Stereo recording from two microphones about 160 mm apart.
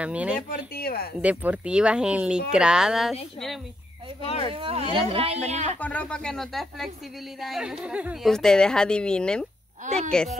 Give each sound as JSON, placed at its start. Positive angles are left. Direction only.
{"t": 0.0, "sound": "speech", "side_deg": -10}
{"t": 0.7, "sound": "speech", "side_deg": 70}
{"t": 1.2, "sound": "speech", "side_deg": -10}
{"t": 4.2, "sound": "speech", "side_deg": 40}
{"t": 4.5, "sound": "speech", "side_deg": -35}
{"t": 5.8, "sound": "speech", "side_deg": 10}
{"t": 9.8, "sound": "speech", "side_deg": -40}